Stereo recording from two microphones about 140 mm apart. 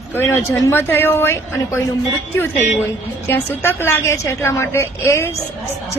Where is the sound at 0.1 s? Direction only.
15° left (ahead or behind).